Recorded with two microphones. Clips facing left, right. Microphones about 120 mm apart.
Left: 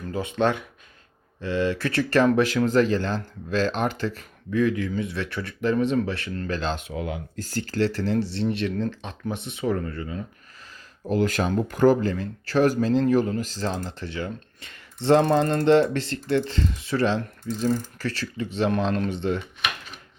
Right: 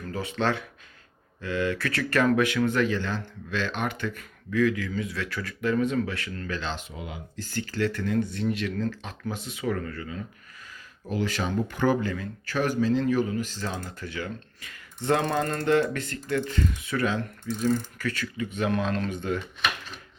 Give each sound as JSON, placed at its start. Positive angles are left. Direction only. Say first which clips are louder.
{"t": 0.0, "sound": "speech", "louder": "left 4 dB", "side_deg": 20}
{"t": 11.1, "sound": "speech", "louder": "left 5 dB", "side_deg": 45}